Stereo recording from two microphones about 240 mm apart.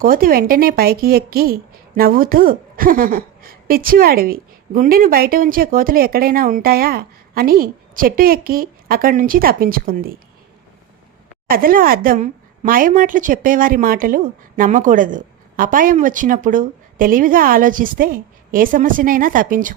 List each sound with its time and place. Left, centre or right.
0.0 s a woman's voice: right
11.4 s a woman's voice: right